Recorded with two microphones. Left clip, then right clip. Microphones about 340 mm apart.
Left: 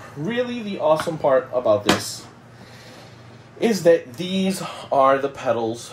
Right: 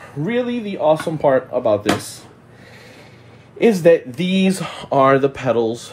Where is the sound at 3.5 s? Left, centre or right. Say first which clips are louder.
Right 4 dB; right.